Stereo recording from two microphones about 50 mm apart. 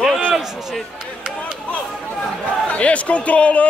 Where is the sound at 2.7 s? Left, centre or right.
Left.